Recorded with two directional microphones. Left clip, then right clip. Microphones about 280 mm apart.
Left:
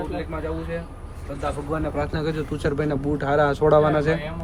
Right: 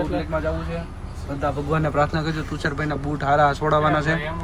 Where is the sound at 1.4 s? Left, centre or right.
Right.